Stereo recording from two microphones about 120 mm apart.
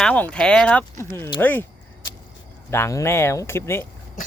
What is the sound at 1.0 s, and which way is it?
Speech, 20° left (ahead or behind).